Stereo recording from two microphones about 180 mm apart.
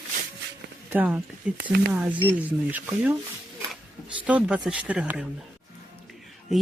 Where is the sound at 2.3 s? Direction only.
10° right (ahead or behind).